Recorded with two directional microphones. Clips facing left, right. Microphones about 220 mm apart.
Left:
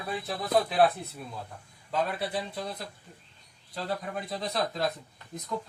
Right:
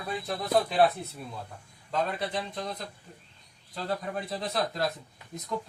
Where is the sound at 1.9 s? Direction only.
5° left (ahead or behind).